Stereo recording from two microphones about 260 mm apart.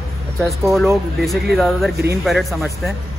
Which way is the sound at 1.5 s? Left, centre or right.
Centre.